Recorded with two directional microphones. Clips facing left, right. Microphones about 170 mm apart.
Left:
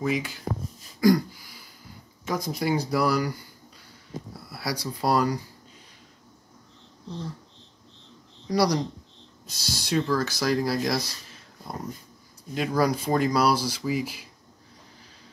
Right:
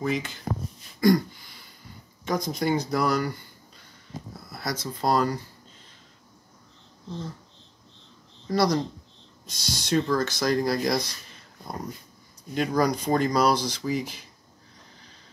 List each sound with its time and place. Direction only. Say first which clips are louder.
0.0 s speech: left 1 dB; 10° left (ahead or behind)
1.0 s a sound: even; 5° left (ahead or behind)
2.2 s speech: right 1 dB; 5° left (ahead or behind)
4.4 s a sound: even; 5° left (ahead or behind)
4.8 s speech: even; 10° left (ahead or behind)
8.5 s speech: even; 15° left (ahead or behind)
12.5 s speech: even; 5° left (ahead or behind)